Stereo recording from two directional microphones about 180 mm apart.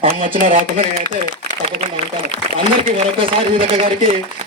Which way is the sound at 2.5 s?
30° right (ahead or behind).